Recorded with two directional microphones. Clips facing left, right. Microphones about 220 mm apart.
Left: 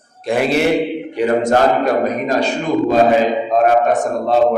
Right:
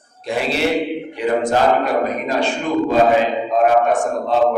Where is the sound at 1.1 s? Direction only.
45° left (ahead or behind).